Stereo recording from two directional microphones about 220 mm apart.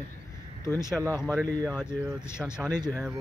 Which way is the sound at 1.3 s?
10° left (ahead or behind).